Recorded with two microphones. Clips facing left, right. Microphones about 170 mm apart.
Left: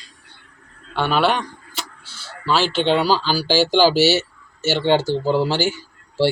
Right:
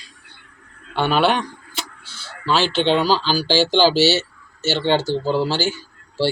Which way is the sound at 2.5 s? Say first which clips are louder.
Even; 5° left (ahead or behind).